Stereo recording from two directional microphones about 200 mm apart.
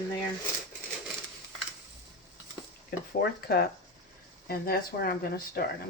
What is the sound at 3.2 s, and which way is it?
Speech, 50° left (ahead or behind).